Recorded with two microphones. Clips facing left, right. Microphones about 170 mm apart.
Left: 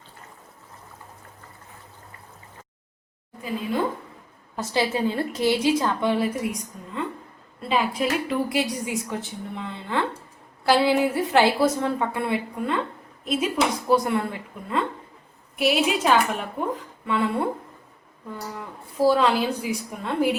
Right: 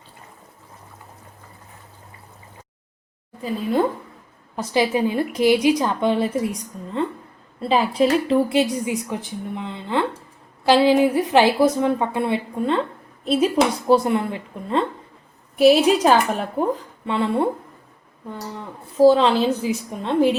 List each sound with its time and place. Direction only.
4.5 s a woman's voice: 15° right (ahead or behind)
19.0 s a woman's voice: 25° right (ahead or behind)